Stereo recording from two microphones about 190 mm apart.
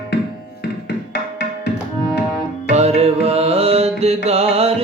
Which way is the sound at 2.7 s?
35° right (ahead or behind).